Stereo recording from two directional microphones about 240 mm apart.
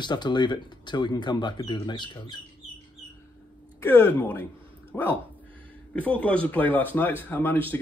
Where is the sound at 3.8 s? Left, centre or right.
Centre.